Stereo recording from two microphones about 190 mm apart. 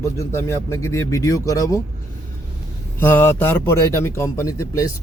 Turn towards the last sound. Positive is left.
turn(degrees=15)  # may be behind; listen again after turning